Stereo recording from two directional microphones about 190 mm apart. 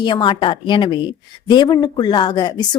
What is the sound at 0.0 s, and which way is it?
Speech, 25° left (ahead or behind).